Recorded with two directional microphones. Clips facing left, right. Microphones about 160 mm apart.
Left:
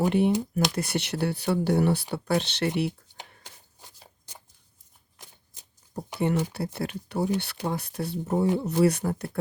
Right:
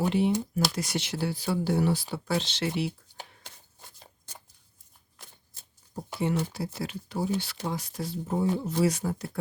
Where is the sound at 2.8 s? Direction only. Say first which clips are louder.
Left 3 dB; 60° left (ahead or behind).